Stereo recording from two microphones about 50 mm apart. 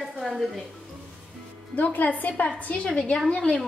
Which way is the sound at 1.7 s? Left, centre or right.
Left.